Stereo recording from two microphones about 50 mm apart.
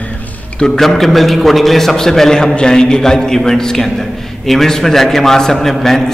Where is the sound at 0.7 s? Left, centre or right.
Centre.